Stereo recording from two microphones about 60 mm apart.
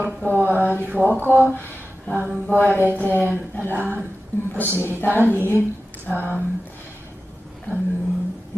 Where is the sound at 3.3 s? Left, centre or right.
Left.